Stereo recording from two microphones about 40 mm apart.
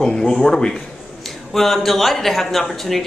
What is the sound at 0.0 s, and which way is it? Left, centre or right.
Speech, centre.